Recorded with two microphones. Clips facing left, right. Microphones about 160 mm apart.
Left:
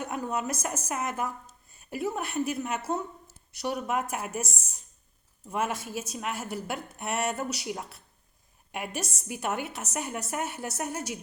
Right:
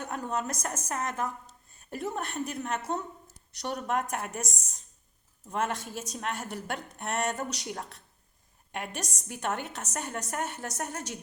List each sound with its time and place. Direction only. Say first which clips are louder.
0.0 s a woman's voice: left 1 dB; 10° left (ahead or behind)